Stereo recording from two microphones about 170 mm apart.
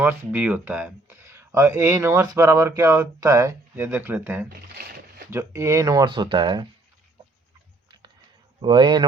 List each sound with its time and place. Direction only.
0.0 s speech: 10° right (ahead or behind)
4.4 s a sound: 65° right (ahead or behind)
5.3 s speech: 15° right (ahead or behind)
8.6 s speech: 25° right (ahead or behind)